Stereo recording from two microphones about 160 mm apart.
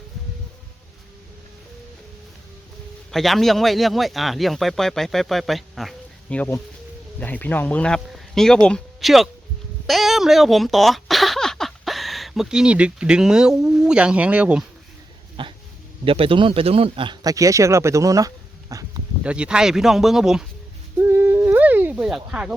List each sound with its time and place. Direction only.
3.1 s speech: centre (ahead or behind)
6.3 s speech: 10° left (ahead or behind); by 14.6 s 10° right (ahead or behind)
15.4 s speech: 30° right (ahead or behind)
18.7 s a sound: 20° right (ahead or behind)
19.2 s speech: 5° right (ahead or behind)
21.0 s a sound: 15° right (ahead or behind)